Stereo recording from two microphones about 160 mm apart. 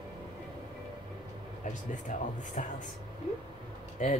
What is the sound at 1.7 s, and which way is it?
Speech, 50° left (ahead or behind).